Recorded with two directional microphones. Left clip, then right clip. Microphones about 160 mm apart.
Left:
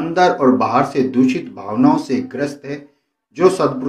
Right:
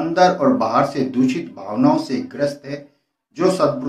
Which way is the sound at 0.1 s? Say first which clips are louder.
Left 2 dB; 15° left (ahead or behind).